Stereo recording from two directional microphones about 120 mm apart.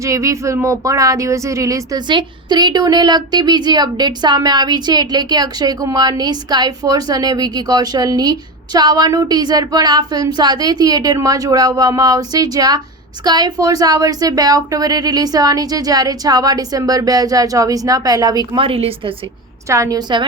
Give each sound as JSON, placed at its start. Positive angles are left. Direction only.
{"t": 0.0, "sound": "speech", "side_deg": -25}
{"t": 18.5, "sound": "a woman's voice", "side_deg": -50}
{"t": 19.6, "sound": "a woman's voice", "side_deg": -25}